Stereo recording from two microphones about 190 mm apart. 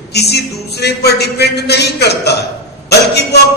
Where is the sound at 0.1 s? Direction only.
60° left (ahead or behind).